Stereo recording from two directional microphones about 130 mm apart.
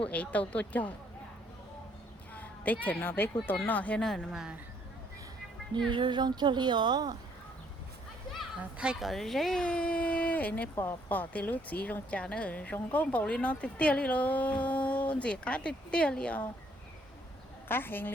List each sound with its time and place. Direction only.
0.1 s a child's voice: 10° left (ahead or behind)
2.8 s a child's voice: 15° left (ahead or behind); by 4.5 s 5° right (ahead or behind)
5.9 s speech: 35° right (ahead or behind)
8.3 s a child's voice: 5° right (ahead or behind)
17.7 s a child's voice: 15° left (ahead or behind)